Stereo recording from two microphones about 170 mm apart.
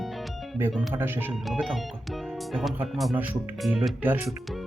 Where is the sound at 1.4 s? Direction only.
Centre (ahead or behind).